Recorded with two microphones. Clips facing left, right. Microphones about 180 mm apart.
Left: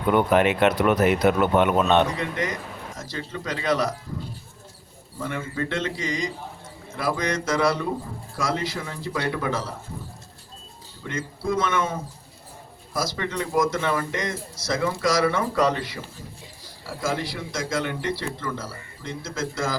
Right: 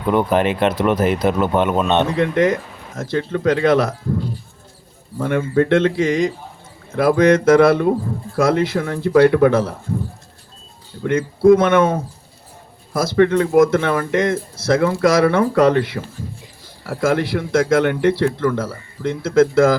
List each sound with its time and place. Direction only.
0.1 s speech: 30° right (ahead or behind)
2.1 s speech: 60° right (ahead or behind)
11.0 s speech: 60° right (ahead or behind)